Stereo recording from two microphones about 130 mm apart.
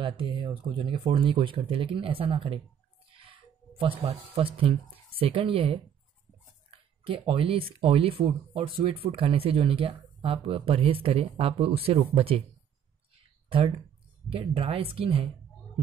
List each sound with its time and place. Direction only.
0.0 s speech: 40° right (ahead or behind)
3.8 s speech: 45° right (ahead or behind)
14.3 s speech: 45° right (ahead or behind)